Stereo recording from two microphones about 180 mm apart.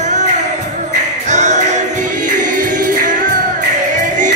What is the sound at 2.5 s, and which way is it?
Music, 50° right (ahead or behind).